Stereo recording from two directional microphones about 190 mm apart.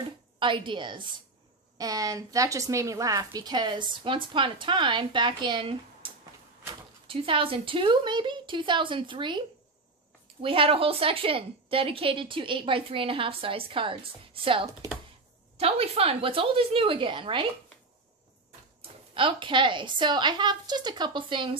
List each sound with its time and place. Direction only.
0.4 s a woman's voice: 25° right (ahead or behind)
7.1 s a woman's voice: 25° right (ahead or behind)
10.4 s a woman's voice: 30° right (ahead or behind)
18.8 s a woman's voice: 25° right (ahead or behind)